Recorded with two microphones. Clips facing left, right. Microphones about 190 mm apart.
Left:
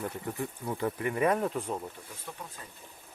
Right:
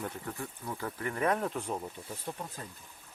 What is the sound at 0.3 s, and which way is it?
Speech, 20° left (ahead or behind).